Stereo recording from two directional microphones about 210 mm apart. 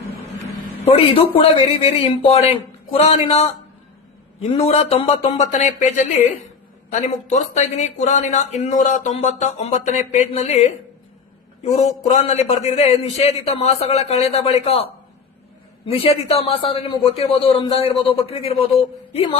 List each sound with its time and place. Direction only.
0.9 s a man's voice: 25° left (ahead or behind)
4.5 s a man's voice: 30° left (ahead or behind)
7.3 s a man's voice: 35° left (ahead or behind)
15.9 s a man's voice: 30° left (ahead or behind)